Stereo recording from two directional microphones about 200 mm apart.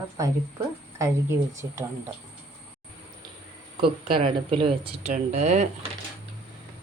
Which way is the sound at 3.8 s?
25° right (ahead or behind).